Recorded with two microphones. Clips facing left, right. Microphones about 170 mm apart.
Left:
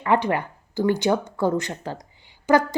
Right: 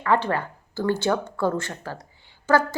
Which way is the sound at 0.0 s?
15° left (ahead or behind).